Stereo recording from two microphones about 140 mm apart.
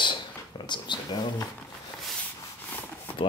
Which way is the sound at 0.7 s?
30° left (ahead or behind).